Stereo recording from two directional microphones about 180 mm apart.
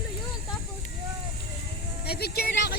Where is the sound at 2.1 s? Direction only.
60° left (ahead or behind).